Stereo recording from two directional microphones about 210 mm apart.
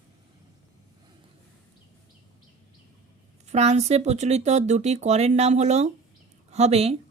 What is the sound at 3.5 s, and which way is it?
A woman's voice, 30° right (ahead or behind).